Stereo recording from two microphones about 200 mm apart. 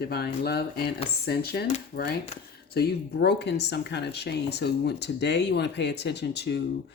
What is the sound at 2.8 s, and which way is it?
Speech, 55° left (ahead or behind).